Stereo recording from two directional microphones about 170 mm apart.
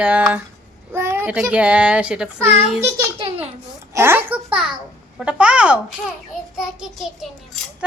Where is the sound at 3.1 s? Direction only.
30° right (ahead or behind).